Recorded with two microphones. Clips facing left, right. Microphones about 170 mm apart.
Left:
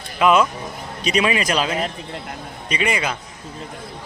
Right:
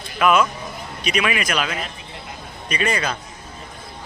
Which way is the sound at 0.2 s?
25° left (ahead or behind).